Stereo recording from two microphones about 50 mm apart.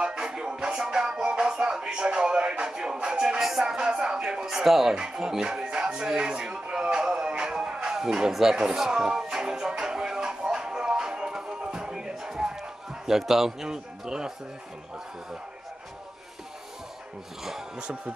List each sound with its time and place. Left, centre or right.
0.0 s music: centre
4.9 s chicken: centre
13.0 s a man's voice: centre
17.4 s a man's voice: centre